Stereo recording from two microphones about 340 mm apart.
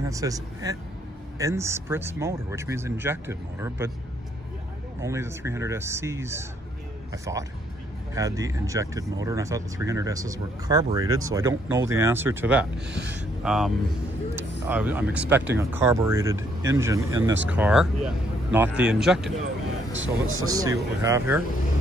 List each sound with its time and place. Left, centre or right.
0.0 s speech: centre
5.0 s speech: centre
12.8 s speech: right
13.2 s a man's voice: centre
19.9 s speech: right
20.4 s speech: centre